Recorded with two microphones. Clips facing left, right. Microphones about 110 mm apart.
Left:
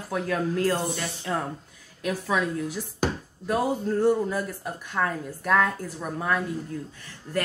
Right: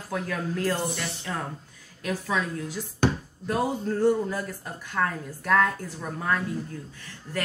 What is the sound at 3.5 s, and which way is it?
A woman's voice, 5° left (ahead or behind).